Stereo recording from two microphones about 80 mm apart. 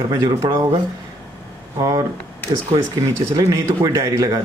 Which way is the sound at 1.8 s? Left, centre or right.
Right.